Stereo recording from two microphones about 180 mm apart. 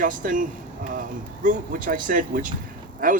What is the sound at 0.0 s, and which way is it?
Speech, 45° right (ahead or behind).